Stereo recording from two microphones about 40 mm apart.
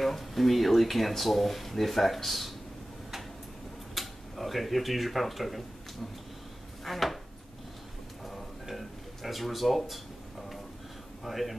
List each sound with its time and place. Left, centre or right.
0.0 s speech: centre
3.9 s speech: centre
6.8 s chopping: centre
8.6 s a sound: centre
11.2 s speech: centre